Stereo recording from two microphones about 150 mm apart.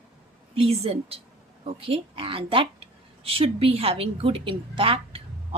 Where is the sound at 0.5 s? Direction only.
40° right (ahead or behind).